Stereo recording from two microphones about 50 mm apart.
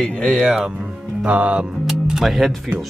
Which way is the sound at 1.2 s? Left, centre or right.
Right.